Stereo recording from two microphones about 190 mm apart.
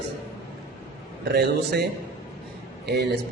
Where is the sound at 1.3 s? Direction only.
60° right (ahead or behind).